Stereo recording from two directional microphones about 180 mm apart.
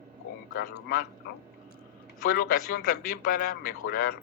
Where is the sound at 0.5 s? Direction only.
55° left (ahead or behind).